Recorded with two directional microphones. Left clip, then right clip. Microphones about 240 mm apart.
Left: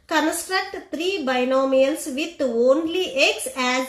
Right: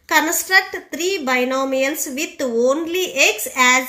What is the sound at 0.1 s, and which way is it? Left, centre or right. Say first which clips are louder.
A woman's voice: right 6 dB; right.